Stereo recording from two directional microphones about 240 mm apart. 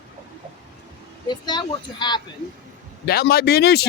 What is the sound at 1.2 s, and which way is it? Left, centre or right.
Speech, centre.